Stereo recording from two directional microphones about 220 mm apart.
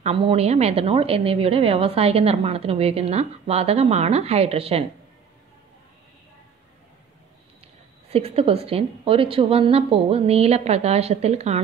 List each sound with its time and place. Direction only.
0.0 s a woman's voice: 25° right (ahead or behind)
8.1 s a woman's voice: 25° right (ahead or behind)